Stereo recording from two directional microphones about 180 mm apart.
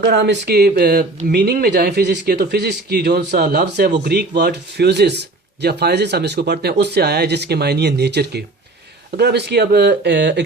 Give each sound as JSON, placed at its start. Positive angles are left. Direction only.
{"t": 0.0, "sound": "speech", "side_deg": -70}